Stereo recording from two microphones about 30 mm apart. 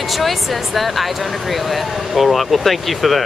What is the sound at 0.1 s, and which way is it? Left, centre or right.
Speech, centre.